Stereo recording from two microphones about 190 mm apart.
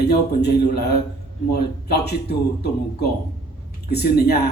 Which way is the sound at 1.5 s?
60° left (ahead or behind).